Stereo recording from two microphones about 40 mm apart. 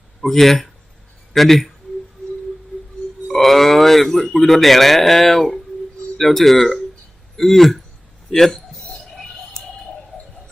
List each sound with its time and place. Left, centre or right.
0.2 s speech: centre
3.2 s speech: centre
8.5 s a sound: centre